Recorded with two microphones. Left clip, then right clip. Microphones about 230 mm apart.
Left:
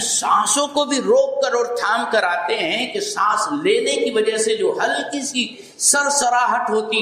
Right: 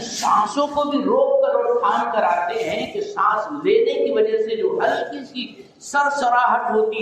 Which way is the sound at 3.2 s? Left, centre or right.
Left.